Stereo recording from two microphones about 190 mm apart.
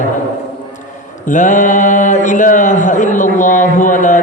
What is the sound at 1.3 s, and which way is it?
Speech, 40° left (ahead or behind).